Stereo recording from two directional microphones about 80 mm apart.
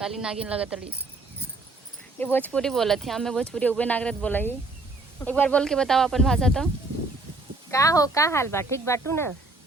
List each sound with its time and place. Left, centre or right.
0.0 s speech: centre
2.1 s speech: left
2.6 s speech: centre
3.4 s speech: centre
5.6 s speech: centre
7.7 s speech: left